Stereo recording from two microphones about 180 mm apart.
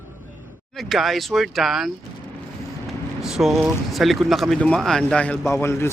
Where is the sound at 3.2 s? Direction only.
Centre (ahead or behind).